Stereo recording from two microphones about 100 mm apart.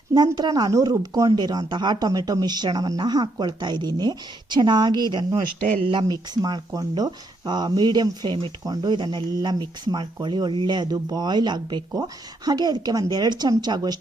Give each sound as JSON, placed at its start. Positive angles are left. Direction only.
{"t": 0.3, "sound": "speech", "side_deg": -45}
{"t": 6.7, "sound": "speech", "side_deg": -40}